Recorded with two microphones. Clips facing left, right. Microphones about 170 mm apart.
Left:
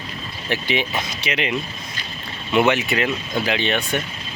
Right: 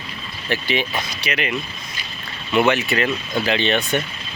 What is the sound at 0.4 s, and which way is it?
Speech, 20° left (ahead or behind).